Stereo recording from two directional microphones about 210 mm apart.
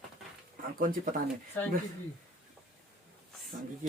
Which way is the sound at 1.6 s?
10° left (ahead or behind).